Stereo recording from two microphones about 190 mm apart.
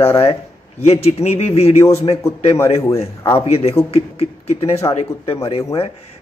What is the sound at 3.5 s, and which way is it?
Speech, 35° left (ahead or behind).